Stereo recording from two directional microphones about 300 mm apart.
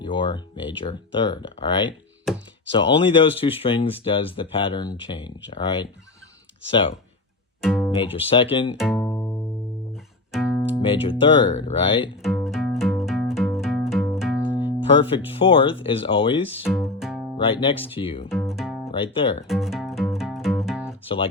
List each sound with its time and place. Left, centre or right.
0.0 s speech: centre
7.6 s music: centre
8.1 s speech: centre
8.7 s speech: centre
9.0 s music: centre
10.3 s music: centre
10.8 s speech: centre
12.2 s music: centre
15.3 s speech: centre
16.5 s speech: centre
17.3 s speech: centre
18.3 s music: centre
18.9 s speech: centre
19.5 s music: centre